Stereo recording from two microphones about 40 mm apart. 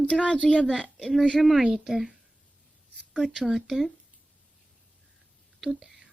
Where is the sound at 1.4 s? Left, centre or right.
Centre.